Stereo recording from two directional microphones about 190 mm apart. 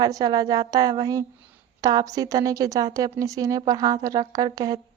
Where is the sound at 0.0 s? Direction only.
20° right (ahead or behind).